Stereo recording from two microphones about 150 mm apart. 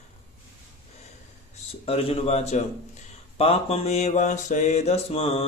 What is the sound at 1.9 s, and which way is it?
Speech, 40° left (ahead or behind).